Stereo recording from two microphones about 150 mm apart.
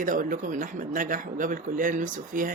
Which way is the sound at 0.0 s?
65° right (ahead or behind).